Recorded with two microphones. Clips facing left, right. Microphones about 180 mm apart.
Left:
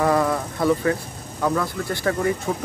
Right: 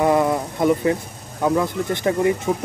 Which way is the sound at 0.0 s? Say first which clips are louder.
Right 2 dB; 20° right (ahead or behind).